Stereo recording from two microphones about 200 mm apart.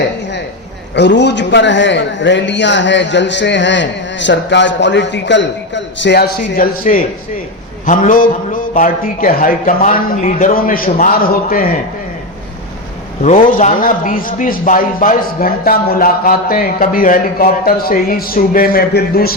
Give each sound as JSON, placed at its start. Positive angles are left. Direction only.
{"t": 0.9, "sound": "a man's voice", "side_deg": 60}
{"t": 13.2, "sound": "speech", "side_deg": 40}